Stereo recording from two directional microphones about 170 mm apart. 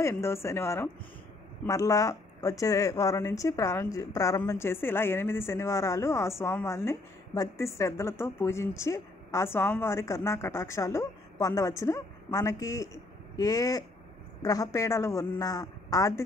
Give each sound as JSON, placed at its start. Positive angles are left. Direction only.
{"t": 0.0, "sound": "a man's voice", "side_deg": 15}